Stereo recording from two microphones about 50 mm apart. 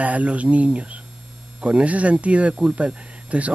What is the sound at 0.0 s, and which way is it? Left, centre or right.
Speech, right.